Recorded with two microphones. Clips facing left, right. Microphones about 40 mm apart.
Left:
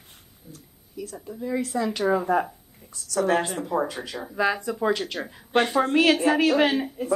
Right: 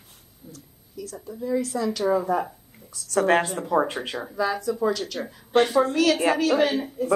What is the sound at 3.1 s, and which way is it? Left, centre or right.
Speech, right.